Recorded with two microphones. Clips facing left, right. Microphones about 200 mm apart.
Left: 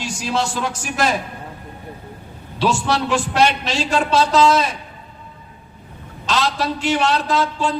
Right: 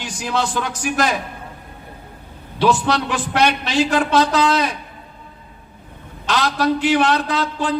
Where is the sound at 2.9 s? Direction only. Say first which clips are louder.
Left 1 dB; 60° right (ahead or behind).